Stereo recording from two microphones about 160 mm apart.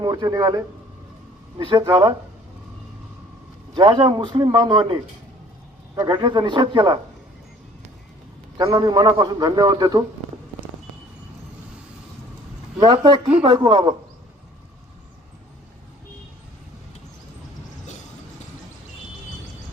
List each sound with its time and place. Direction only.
0.0 s a man's voice: 25° right (ahead or behind)
3.8 s a man's voice: 30° right (ahead or behind)
6.0 s a man's voice: 25° right (ahead or behind)
8.5 s a man's voice: 20° right (ahead or behind)
12.8 s a man's voice: 25° right (ahead or behind)